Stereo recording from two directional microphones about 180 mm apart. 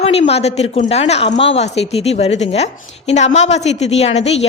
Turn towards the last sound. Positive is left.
turn(degrees=35)  # may be behind; listen again after turning